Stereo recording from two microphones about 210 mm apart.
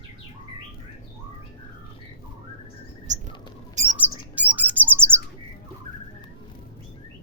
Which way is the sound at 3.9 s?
10° right (ahead or behind).